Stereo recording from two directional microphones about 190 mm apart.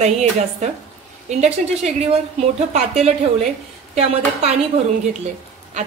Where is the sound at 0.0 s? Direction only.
35° right (ahead or behind).